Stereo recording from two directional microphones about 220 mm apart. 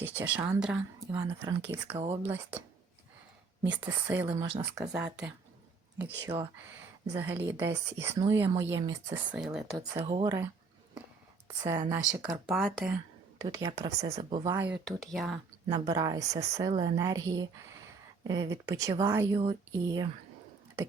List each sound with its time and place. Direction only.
0.0 s speech: 10° right (ahead or behind)
3.7 s speech: 10° right (ahead or behind)
4.3 s speech: 20° right (ahead or behind)
6.2 s speech: 20° right (ahead or behind)
9.3 s speech: 5° right (ahead or behind)
9.7 s speech: 20° right (ahead or behind)
11.6 s speech: 15° right (ahead or behind)
12.5 s speech: centre (ahead or behind)
13.4 s speech: 15° right (ahead or behind)
14.0 s speech: 25° right (ahead or behind)
14.4 s speech: 10° right (ahead or behind)
14.8 s speech: centre (ahead or behind)
15.7 s speech: 20° right (ahead or behind)